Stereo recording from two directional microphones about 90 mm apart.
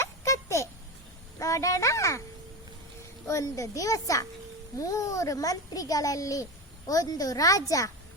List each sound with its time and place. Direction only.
0.0 s a sound: 35° left (ahead or behind)
1.4 s speech: 40° left (ahead or behind)
3.2 s a child's voice: 35° left (ahead or behind)